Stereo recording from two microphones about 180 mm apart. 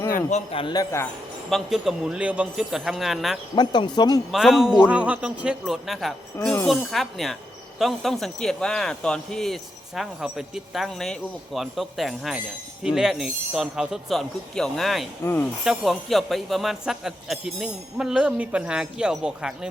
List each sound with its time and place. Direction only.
0.1 s a man's voice: 40° left (ahead or behind); by 1.0 s 20° left (ahead or behind)
1.5 s speech: centre (ahead or behind)
3.5 s a man's voice: 25° left (ahead or behind)
4.3 s speech: centre (ahead or behind)
15.2 s speech: 10° left (ahead or behind)
15.6 s speech: centre (ahead or behind)